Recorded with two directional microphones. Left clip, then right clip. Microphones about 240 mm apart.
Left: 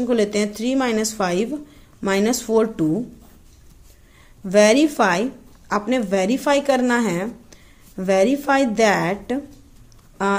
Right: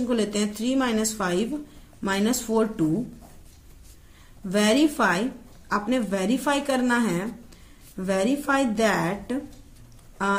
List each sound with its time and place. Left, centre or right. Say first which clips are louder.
0.0 s speech: left 6 dB; left
4.5 s speech: left 7 dB; left